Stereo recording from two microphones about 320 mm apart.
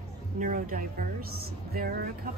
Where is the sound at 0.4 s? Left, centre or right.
Right.